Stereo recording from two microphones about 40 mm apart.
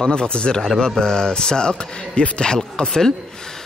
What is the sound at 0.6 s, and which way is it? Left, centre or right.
Speech, centre.